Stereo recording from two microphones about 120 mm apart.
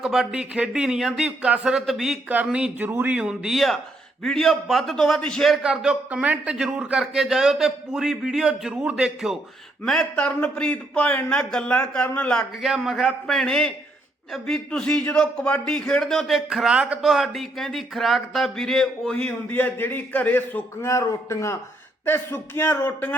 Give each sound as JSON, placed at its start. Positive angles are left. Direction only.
{"t": 0.0, "sound": "a man's voice", "side_deg": -5}
{"t": 12.6, "sound": "a man's voice", "side_deg": 0}
{"t": 19.1, "sound": "a man's voice", "side_deg": 15}